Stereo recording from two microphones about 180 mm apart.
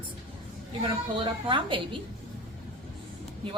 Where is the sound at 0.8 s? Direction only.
30° right (ahead or behind).